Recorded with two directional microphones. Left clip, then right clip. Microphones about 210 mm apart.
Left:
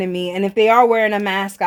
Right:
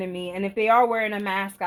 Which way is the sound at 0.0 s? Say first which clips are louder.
Left 8 dB; 45° left (ahead or behind).